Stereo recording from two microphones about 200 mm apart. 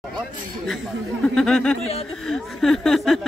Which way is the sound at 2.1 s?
Centre (ahead or behind).